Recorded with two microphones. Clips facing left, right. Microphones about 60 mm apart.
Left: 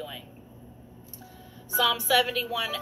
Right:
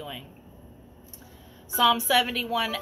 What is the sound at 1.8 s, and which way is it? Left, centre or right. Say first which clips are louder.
Speech: right 2 dB; right.